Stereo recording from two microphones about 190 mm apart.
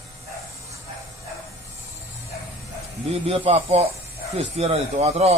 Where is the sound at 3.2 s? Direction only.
30° right (ahead or behind).